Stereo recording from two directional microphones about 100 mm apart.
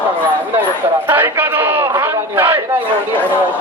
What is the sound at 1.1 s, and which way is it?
A man's voice, 20° right (ahead or behind).